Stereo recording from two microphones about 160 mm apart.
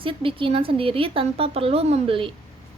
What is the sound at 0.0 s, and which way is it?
A woman's voice, 35° right (ahead or behind).